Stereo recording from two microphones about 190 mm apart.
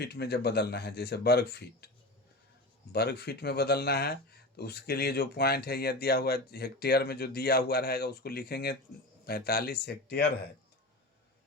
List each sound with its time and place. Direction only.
0.0 s speech: 60° left (ahead or behind)
2.9 s speech: 55° left (ahead or behind)